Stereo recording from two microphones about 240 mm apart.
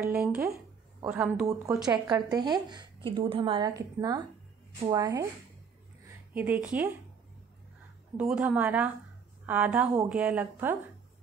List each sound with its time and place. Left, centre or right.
0.0 s speech: centre
6.3 s speech: centre
8.2 s a woman's voice: centre